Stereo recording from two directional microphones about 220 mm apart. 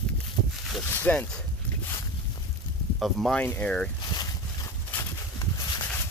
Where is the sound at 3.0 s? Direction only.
Centre (ahead or behind).